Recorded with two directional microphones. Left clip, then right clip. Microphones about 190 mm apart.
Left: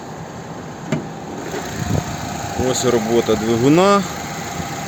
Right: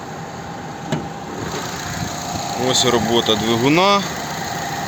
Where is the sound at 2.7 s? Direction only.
20° left (ahead or behind).